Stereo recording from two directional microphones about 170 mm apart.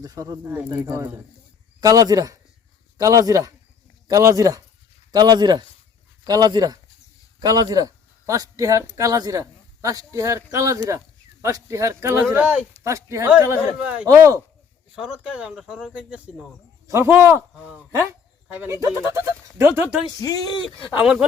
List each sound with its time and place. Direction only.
0.0 s speech: 20° right (ahead or behind)
14.1 s speech: 20° right (ahead or behind)
14.9 s speech: 5° right (ahead or behind)
16.8 s speech: 15° right (ahead or behind)
20.2 s speech: 20° left (ahead or behind)
21.0 s speech: 5° right (ahead or behind)